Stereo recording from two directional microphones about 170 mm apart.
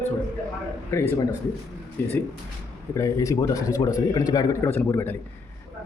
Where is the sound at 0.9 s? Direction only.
15° left (ahead or behind).